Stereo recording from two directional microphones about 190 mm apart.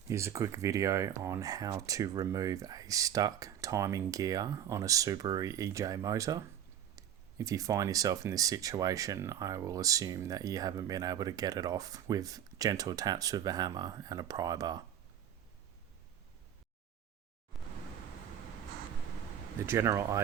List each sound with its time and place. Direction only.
0.1 s speech: 15° right (ahead or behind)
17.5 s pink noise: centre (ahead or behind)
19.5 s speech: 15° right (ahead or behind)